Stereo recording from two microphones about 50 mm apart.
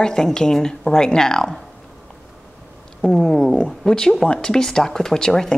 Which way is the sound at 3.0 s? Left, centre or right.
Centre.